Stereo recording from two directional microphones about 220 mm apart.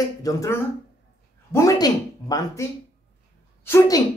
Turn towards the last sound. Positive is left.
turn(degrees=15)  # may be behind; listen again after turning